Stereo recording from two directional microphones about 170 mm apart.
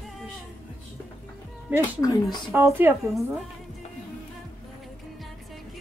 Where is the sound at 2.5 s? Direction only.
15° right (ahead or behind).